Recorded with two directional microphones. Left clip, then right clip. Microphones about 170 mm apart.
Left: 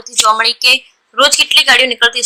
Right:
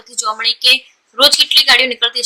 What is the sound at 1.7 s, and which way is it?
Speech, 10° left (ahead or behind).